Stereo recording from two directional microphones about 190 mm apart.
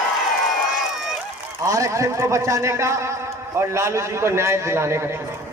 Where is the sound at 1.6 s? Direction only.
15° right (ahead or behind).